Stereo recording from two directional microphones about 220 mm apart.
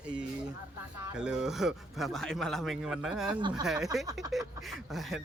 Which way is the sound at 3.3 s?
20° right (ahead or behind).